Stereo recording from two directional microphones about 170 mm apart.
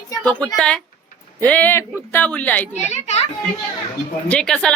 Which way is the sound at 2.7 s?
40° left (ahead or behind).